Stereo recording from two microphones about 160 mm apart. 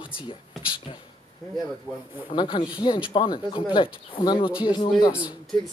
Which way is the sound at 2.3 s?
30° left (ahead or behind).